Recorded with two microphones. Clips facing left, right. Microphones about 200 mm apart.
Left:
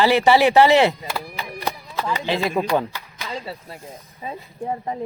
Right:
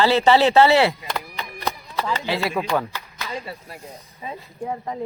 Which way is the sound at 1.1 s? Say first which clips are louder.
Left 1 dB; 5° left (ahead or behind).